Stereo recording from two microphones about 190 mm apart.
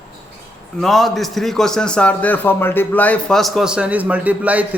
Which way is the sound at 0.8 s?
Centre (ahead or behind).